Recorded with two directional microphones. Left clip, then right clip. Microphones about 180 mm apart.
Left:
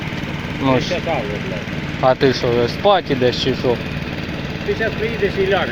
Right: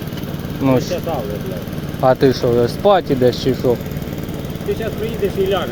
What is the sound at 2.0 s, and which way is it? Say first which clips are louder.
Speech: right 1 dB; 40° right (ahead or behind).